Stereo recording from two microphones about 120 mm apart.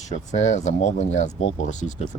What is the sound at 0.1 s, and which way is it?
Speech, 80° left.